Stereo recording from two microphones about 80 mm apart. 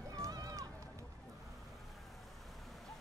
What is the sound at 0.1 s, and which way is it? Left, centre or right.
Run, right.